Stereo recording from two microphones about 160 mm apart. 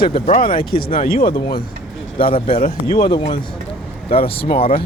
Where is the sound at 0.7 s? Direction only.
70° left (ahead or behind).